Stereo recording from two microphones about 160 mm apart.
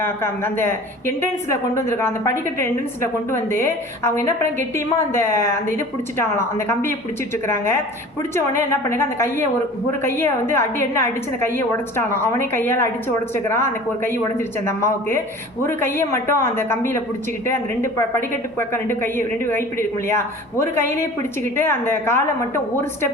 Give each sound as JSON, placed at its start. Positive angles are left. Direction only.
{"t": 0.0, "sound": "a woman's voice", "side_deg": 15}